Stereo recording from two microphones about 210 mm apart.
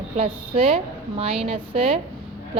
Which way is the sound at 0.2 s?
25° right (ahead or behind).